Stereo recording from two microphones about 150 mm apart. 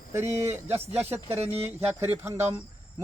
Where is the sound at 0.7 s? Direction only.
45° right (ahead or behind).